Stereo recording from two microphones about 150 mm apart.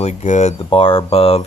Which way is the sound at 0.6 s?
35° left (ahead or behind).